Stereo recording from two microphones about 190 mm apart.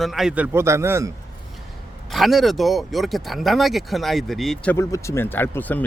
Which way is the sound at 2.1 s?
Centre (ahead or behind).